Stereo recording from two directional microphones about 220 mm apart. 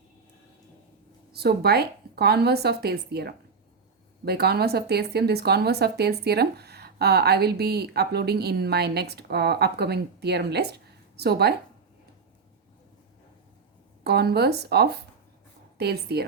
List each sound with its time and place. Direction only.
1.3 s speech: 45° right (ahead or behind)
14.0 s speech: 45° right (ahead or behind)